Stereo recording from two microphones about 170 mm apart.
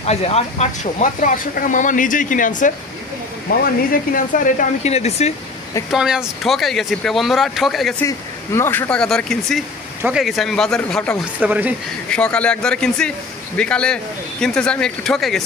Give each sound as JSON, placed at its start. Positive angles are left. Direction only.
{"t": 0.0, "sound": "speech", "side_deg": 40}
{"t": 5.9, "sound": "speech", "side_deg": -5}
{"t": 8.5, "sound": "speech", "side_deg": 15}
{"t": 11.3, "sound": "speech", "side_deg": -10}
{"t": 12.1, "sound": "a man's voice", "side_deg": 5}